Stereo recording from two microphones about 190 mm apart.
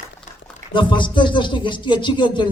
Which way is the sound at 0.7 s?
25° left (ahead or behind).